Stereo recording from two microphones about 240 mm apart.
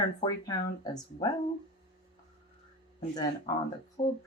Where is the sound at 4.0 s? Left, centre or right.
Left.